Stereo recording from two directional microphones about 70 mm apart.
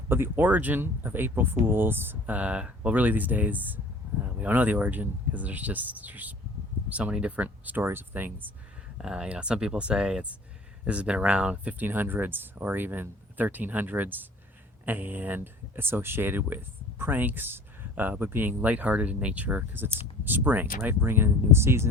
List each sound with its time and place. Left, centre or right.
0.1 s speech: right
9.0 s speech: centre; by 21.8 s right